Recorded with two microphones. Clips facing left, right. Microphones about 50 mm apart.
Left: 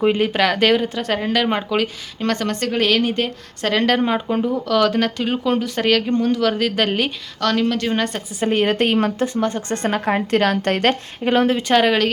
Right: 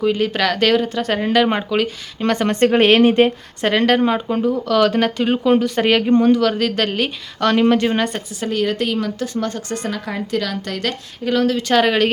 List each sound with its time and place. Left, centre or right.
0.2 s speech: centre; by 3.3 s right
3.6 s speech: centre
7.3 s speech: centre
7.9 s speech: centre
8.4 s a woman's voice: left
9.2 s a woman's voice: left
11.7 s speech: centre